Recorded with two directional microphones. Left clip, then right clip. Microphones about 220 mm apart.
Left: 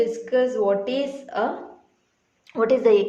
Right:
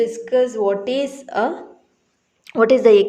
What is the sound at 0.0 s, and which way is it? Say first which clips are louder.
A woman's voice: right 3 dB; 35° right (ahead or behind).